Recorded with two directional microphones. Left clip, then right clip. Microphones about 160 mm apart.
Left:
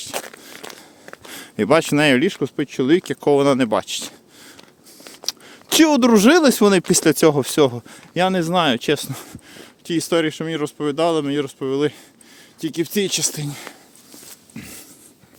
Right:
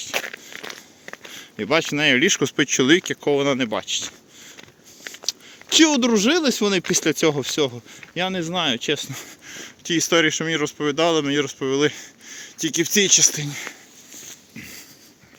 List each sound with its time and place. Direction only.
0.1 s a sound: 5° left (ahead or behind)
1.3 s speech: 55° left (ahead or behind)
2.2 s speech: 10° left (ahead or behind)
3.0 s speech: 40° left (ahead or behind)
5.5 s speech: 70° left (ahead or behind)
7.0 s speech: 55° left (ahead or behind)
9.5 s speech: 20° left (ahead or behind)
13.4 s speech: 35° left (ahead or behind)
14.3 s a sound: 40° left (ahead or behind)